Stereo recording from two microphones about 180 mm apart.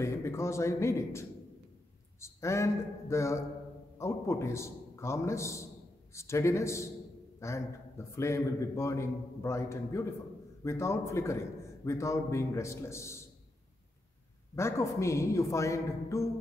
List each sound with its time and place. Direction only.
0.0 s a man's voice: 15° left (ahead or behind)
14.5 s a man's voice: 15° left (ahead or behind)